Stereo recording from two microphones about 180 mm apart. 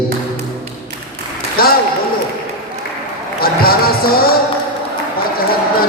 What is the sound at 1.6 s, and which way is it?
Mantra, 55° left (ahead or behind).